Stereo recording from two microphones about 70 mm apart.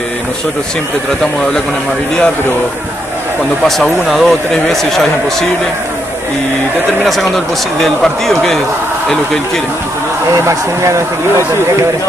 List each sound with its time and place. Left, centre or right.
3.6 s speech: centre
7.1 s speech: centre
10.4 s speech: right